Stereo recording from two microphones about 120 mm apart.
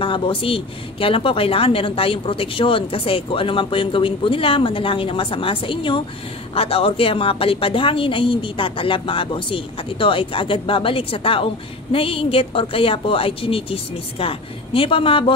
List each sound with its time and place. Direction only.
0.0 s a woman's voice: 45° left (ahead or behind)